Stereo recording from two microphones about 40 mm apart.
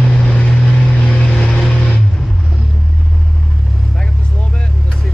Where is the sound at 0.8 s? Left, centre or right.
Left.